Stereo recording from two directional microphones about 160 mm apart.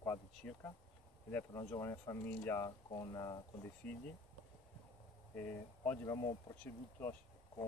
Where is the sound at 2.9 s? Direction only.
25° left (ahead or behind).